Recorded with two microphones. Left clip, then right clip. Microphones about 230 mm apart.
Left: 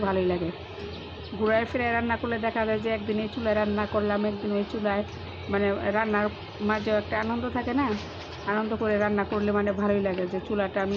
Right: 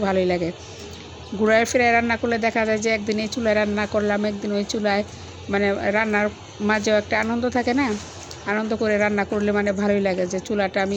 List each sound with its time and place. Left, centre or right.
0.0 s speech: centre
1.5 s a woman's voice: right